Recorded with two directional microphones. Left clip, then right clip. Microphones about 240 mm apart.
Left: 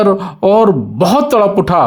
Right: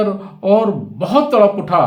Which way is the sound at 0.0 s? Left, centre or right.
Left.